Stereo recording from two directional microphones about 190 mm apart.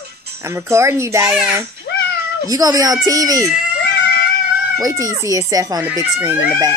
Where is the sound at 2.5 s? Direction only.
20° right (ahead or behind).